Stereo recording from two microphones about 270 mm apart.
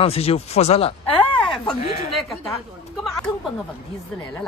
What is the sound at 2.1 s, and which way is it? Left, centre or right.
Speech, centre.